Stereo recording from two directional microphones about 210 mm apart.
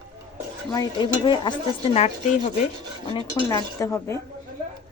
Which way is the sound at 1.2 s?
20° left (ahead or behind).